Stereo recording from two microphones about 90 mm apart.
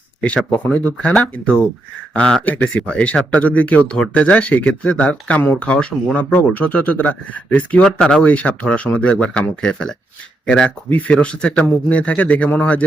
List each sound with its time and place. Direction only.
0.2 s speech: 15° left (ahead or behind)